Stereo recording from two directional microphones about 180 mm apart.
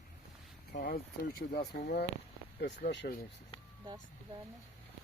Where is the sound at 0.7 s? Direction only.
60° left (ahead or behind).